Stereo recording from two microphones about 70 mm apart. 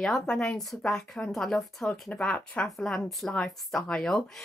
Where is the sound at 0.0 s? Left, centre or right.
Centre.